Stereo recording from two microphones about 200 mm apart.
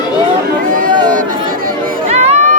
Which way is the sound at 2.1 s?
35° right (ahead or behind).